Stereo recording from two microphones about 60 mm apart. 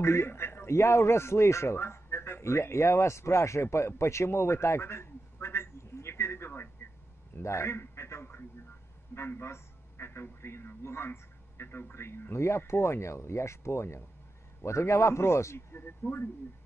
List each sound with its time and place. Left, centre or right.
0.0 s a man's voice: left
3.7 s a sound: left
10.8 s a man's voice: left